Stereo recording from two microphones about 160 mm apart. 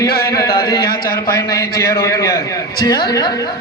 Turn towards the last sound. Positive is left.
turn(degrees=25)  # may be behind; listen again after turning